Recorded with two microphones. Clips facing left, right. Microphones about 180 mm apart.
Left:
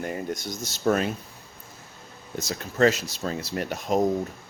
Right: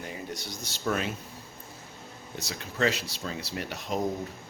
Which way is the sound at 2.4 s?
45° left (ahead or behind).